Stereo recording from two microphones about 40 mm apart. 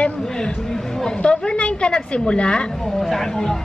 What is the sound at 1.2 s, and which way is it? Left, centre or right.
A woman's voice, left.